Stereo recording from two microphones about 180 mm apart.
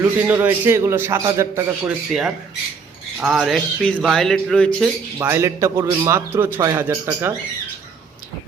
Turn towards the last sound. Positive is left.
turn(degrees=-15)  # may be behind; listen again after turning